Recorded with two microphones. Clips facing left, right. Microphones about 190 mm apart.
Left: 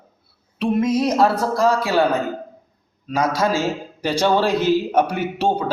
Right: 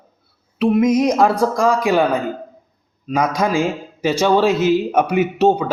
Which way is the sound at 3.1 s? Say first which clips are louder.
Right 1 dB; 15° right (ahead or behind).